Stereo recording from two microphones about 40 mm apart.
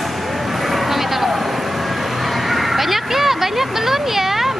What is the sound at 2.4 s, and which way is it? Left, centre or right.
Speech, centre.